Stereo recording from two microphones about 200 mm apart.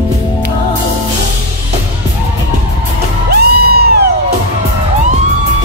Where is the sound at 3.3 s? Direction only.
50° right (ahead or behind).